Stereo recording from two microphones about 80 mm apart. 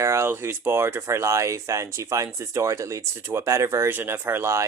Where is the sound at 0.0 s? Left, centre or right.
Right.